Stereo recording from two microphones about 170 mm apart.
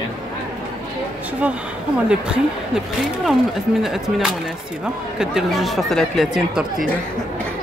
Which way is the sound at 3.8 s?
Centre (ahead or behind).